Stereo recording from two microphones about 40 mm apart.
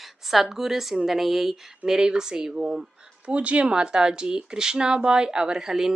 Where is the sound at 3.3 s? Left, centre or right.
Right.